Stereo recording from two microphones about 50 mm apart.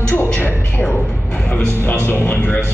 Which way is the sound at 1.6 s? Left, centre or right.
Left.